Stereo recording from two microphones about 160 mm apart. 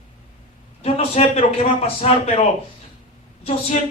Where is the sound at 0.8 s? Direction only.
40° left (ahead or behind).